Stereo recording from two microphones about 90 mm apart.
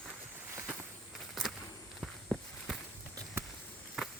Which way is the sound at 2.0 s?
Centre (ahead or behind).